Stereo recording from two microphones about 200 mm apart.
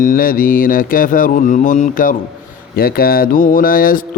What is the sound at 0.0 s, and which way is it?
Speech, 45° left (ahead or behind).